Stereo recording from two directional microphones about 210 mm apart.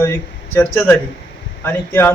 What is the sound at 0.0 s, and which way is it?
A man's voice, 10° left (ahead or behind).